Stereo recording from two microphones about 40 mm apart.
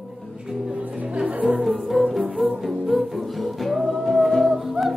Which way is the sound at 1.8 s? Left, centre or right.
Centre.